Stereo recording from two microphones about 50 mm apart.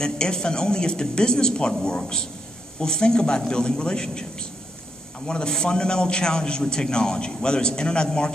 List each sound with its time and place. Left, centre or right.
0.0 s a man's voice: centre